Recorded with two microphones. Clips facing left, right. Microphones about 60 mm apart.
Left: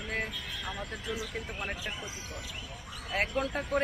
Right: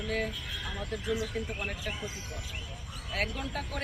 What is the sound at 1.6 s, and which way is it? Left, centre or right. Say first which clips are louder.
Speech: left 1 dB; left.